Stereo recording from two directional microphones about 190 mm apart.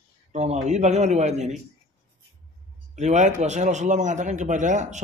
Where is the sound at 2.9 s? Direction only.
35° right (ahead or behind).